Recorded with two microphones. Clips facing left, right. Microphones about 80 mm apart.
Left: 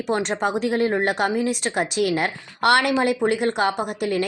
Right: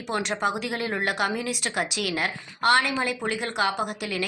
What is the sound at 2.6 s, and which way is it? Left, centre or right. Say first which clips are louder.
Speech: left 4 dB; left.